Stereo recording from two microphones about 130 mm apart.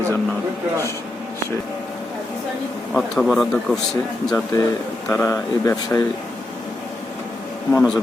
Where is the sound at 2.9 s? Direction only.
Centre (ahead or behind).